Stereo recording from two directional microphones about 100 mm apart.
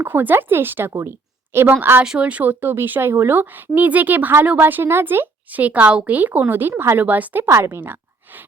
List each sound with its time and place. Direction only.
0.0 s a woman's voice: 20° right (ahead or behind)